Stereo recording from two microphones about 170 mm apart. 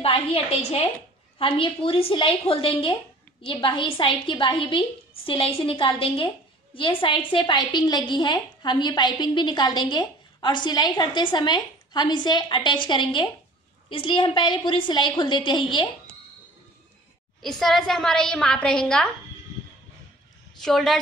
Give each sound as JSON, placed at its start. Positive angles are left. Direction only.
{"t": 0.0, "sound": "a woman's voice", "side_deg": 35}
{"t": 17.4, "sound": "a woman's voice", "side_deg": 0}
{"t": 20.6, "sound": "a woman's voice", "side_deg": 0}